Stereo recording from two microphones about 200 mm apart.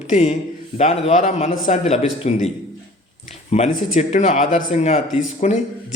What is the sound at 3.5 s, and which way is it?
Speech, 35° left (ahead or behind).